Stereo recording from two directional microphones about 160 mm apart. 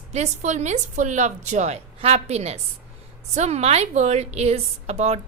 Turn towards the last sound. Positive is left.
turn(degrees=-40)  # may be behind; listen again after turning